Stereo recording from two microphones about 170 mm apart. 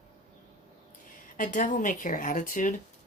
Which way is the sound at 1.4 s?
50° left (ahead or behind).